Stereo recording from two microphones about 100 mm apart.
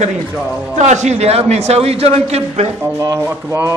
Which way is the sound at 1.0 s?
90° right.